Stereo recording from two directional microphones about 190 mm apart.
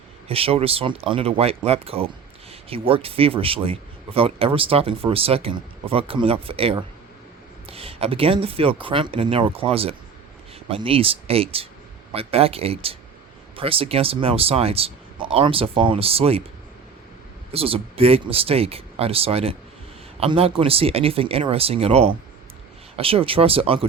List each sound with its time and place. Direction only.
0.3 s speech: 30° right (ahead or behind)
17.5 s speech: 30° right (ahead or behind)